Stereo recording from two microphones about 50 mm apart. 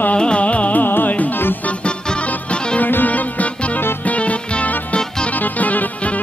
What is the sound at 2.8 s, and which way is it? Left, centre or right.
Music, left.